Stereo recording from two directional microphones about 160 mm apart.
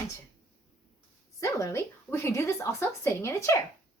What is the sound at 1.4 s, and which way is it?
Speech, 20° left (ahead or behind).